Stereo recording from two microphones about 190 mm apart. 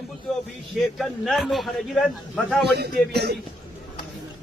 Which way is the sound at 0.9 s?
Centre (ahead or behind).